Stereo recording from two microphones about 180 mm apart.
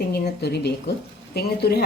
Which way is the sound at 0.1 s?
65° left (ahead or behind).